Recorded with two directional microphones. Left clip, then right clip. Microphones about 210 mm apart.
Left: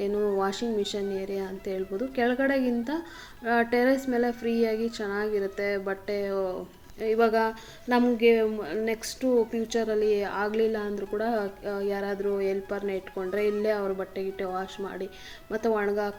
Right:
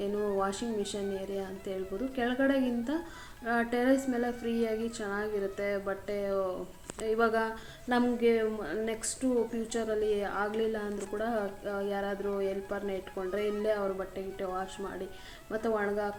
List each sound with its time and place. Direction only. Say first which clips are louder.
0.3 s a woman's voice: left 4 dB; 25° left (ahead or behind)